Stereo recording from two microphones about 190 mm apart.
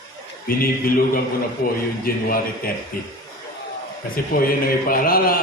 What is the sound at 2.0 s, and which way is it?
Speech, 50° left (ahead or behind).